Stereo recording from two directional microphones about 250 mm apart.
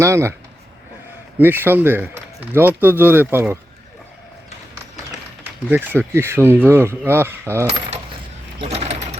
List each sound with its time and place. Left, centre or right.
0.0 s speech: centre
1.4 s speech: centre
5.4 s speech: centre
8.6 s mechanisms: right